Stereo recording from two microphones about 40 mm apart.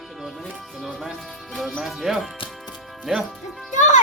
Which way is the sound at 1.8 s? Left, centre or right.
Centre.